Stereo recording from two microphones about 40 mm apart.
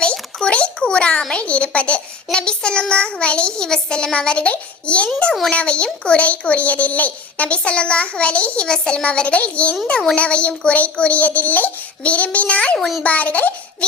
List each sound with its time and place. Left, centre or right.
0.0 s a sound: left
1.3 s a child's voice: left
8.6 s a child's voice: left
9.0 s a child's voice: left